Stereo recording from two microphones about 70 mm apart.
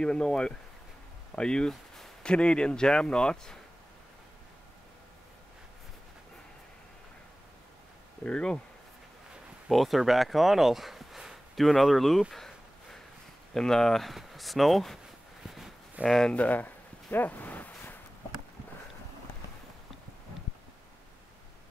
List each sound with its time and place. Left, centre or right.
0.0 s speech: centre
8.3 s speech: centre
9.7 s speech: centre
15.4 s a sound: centre
16.1 s speech: centre
16.3 s a sound: left